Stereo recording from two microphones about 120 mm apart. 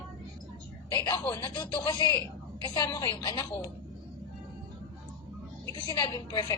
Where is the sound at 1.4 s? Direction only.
40° left (ahead or behind).